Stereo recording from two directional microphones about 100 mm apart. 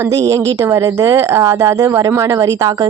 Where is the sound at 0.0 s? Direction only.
30° right (ahead or behind).